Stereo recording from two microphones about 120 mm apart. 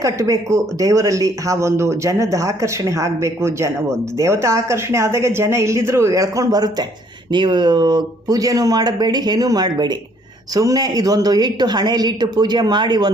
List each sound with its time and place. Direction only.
0.0 s a man's voice: 25° right (ahead or behind)